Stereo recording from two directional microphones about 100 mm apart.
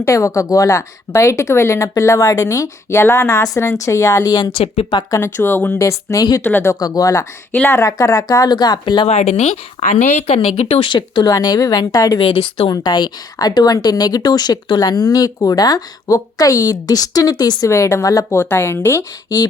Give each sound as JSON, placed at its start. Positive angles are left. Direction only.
{"t": 0.0, "sound": "speech", "side_deg": 35}
{"t": 4.5, "sound": "speech", "side_deg": 80}
{"t": 5.1, "sound": "a woman's voice", "side_deg": 25}
{"t": 6.7, "sound": "a woman's voice", "side_deg": 40}
{"t": 9.0, "sound": "speech", "side_deg": 90}
{"t": 9.8, "sound": "a woman's voice", "side_deg": 65}
{"t": 10.2, "sound": "speech", "side_deg": 90}
{"t": 10.8, "sound": "a woman's voice", "side_deg": 50}
{"t": 12.2, "sound": "a woman's voice", "side_deg": 65}
{"t": 12.7, "sound": "speech", "side_deg": 45}
{"t": 17.7, "sound": "a woman's voice", "side_deg": 30}